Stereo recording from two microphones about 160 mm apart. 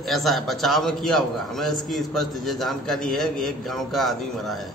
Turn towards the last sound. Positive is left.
turn(degrees=0)  # may be behind; listen again after turning